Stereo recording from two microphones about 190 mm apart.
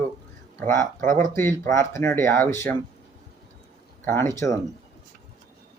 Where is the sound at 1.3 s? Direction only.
15° left (ahead or behind).